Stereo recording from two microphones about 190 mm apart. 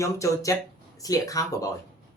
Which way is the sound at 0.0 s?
15° left (ahead or behind).